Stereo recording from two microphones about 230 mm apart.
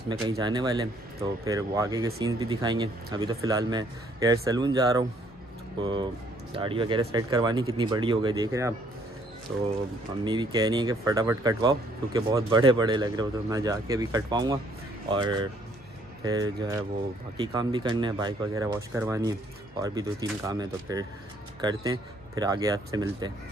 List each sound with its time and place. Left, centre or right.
0.2 s speech: centre
10.2 s speech: centre